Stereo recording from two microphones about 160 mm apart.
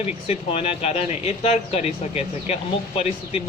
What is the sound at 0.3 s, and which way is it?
Speech, 40° left (ahead or behind).